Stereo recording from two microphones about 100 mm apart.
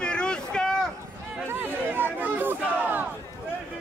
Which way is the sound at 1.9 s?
20° right (ahead or behind).